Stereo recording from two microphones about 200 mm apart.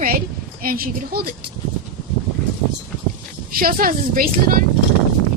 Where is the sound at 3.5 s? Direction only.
45° right (ahead or behind).